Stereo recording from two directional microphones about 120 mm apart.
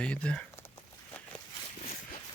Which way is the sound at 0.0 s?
10° left (ahead or behind).